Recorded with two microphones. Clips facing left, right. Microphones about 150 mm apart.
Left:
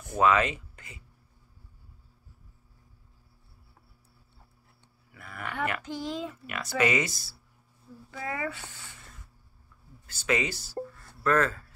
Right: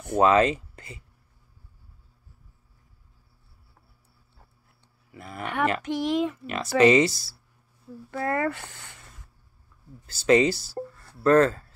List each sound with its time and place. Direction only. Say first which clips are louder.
0.2 s speech: right 4 dB; 35° right (ahead or behind)
5.1 s a sound: right 6 dB; 30° right (ahead or behind)
5.4 s speech: right 6 dB; 75° right (ahead or behind)
6.4 s speech: right 8 dB; 30° right (ahead or behind)
8.1 s speech: right 8 dB; 55° right (ahead or behind)
10.0 s speech: right 9 dB; 35° right (ahead or behind)